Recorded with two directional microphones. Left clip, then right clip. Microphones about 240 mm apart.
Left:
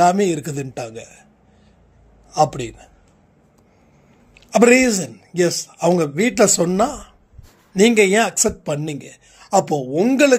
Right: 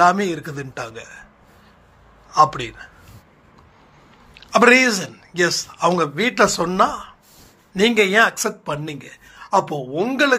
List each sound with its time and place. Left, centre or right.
0.0 s speech: left
4.3 s speech: left